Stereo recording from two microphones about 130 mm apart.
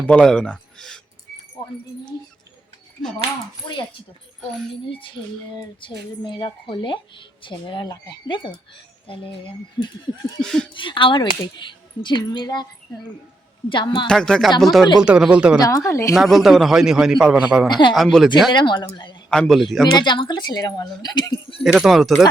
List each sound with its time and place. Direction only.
0.1 s speech: 5° left (ahead or behind)
3.7 s a woman's voice: 35° left (ahead or behind)
10.4 s a man's voice: 5° left (ahead or behind)
10.8 s a woman's voice: 40° left (ahead or behind)
14.1 s a man's voice: 5° left (ahead or behind)
15.6 s speech: 25° left (ahead or behind)
16.1 s a man's voice: centre (ahead or behind)
18.5 s a woman's voice: 35° left (ahead or behind)
19.3 s a man's voice: 5° left (ahead or behind)
19.8 s a woman's voice: 35° left (ahead or behind)
21.6 s a man's voice: 5° right (ahead or behind)